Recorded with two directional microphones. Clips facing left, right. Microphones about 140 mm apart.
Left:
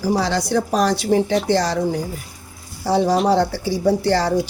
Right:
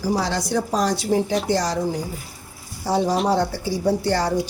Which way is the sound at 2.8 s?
75° left (ahead or behind).